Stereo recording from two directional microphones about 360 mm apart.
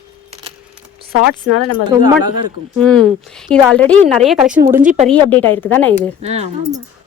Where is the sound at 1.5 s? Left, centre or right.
Left.